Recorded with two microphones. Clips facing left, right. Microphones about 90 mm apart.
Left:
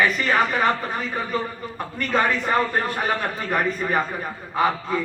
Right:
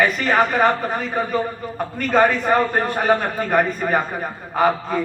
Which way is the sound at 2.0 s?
40° right (ahead or behind).